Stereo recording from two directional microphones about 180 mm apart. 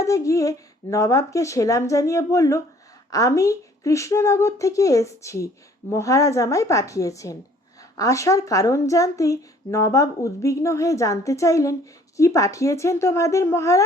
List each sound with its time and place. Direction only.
0.0 s a woman's voice: 15° left (ahead or behind)